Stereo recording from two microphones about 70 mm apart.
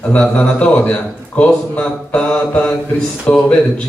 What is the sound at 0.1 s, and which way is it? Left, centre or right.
A man's voice, centre.